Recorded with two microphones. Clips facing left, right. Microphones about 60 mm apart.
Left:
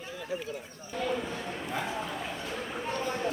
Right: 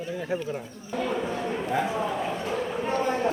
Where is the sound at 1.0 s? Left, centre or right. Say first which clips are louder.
Right 4 dB; right.